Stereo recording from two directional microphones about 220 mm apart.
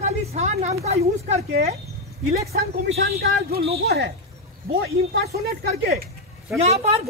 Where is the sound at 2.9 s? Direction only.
45° right (ahead or behind).